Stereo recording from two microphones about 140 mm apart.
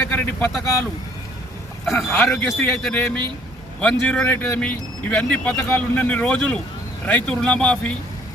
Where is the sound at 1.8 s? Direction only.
Centre (ahead or behind).